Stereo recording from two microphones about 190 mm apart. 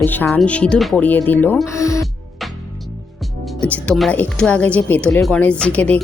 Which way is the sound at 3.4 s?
5° left (ahead or behind).